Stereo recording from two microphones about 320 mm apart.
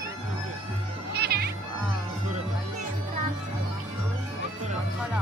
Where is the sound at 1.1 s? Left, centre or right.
Right.